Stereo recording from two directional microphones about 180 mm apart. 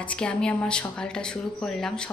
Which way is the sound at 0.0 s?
5° left (ahead or behind).